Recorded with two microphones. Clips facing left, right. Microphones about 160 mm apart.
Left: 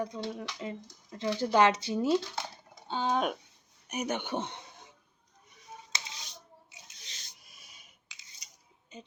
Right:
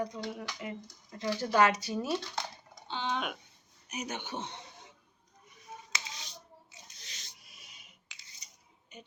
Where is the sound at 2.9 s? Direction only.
40° left (ahead or behind).